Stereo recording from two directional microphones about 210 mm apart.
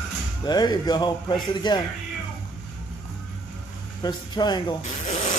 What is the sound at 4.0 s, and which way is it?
Speech, 20° left (ahead or behind).